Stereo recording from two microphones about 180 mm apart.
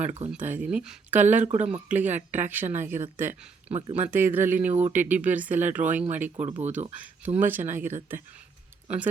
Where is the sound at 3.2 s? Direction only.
35° right (ahead or behind).